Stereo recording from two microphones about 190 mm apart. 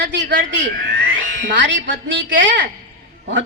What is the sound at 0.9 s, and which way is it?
Speech, 65° right (ahead or behind).